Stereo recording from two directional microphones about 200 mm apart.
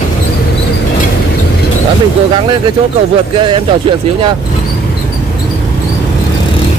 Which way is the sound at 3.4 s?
25° right (ahead or behind).